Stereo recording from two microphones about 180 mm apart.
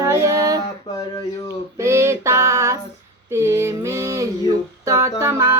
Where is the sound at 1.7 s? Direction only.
15° right (ahead or behind).